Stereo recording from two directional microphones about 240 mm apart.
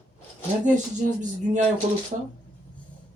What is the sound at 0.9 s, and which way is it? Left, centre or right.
Speech, right.